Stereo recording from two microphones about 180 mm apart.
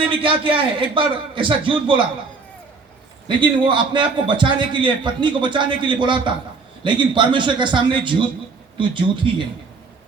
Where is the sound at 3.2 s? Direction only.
25° right (ahead or behind).